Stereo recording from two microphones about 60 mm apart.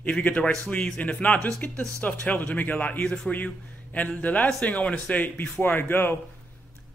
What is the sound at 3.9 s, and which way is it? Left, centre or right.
A man's voice, left.